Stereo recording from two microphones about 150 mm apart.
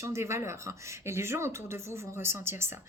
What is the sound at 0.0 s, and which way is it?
Speech, 20° right (ahead or behind).